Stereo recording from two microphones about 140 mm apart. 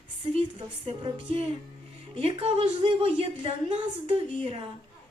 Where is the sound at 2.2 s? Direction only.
40° right (ahead or behind).